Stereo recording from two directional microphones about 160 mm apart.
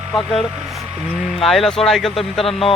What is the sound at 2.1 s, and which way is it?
Speech, 35° left (ahead or behind).